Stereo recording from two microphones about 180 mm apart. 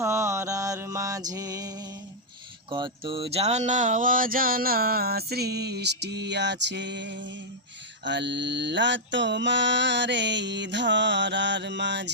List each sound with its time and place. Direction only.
0.0 s music: 15° right (ahead or behind)
2.6 s mantra: 25° right (ahead or behind); by 12.1 s 75° right (ahead or behind)